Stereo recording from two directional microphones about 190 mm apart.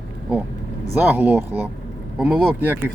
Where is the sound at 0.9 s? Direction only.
10° right (ahead or behind).